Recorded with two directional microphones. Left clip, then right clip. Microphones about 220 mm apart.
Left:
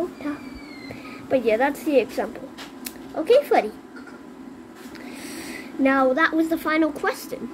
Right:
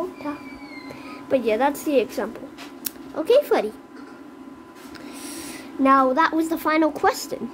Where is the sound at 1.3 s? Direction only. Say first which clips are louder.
Even; 20° right (ahead or behind).